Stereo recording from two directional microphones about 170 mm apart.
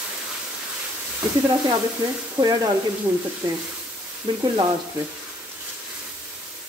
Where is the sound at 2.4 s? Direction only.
25° right (ahead or behind).